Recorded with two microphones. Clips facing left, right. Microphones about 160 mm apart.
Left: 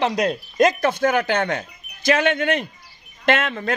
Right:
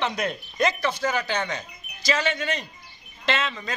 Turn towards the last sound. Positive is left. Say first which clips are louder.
# left 7 dB
turn(degrees=55)  # may be behind; listen again after turning